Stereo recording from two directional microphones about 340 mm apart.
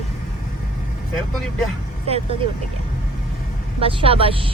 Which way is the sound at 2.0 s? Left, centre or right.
Centre.